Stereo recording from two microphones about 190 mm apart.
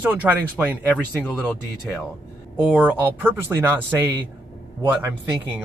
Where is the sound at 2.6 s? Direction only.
10° right (ahead or behind).